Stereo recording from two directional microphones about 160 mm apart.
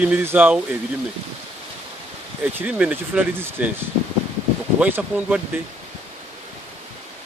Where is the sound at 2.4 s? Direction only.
10° right (ahead or behind).